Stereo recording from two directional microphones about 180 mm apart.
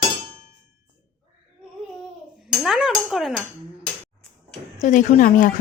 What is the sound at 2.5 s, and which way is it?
Speech, centre (ahead or behind).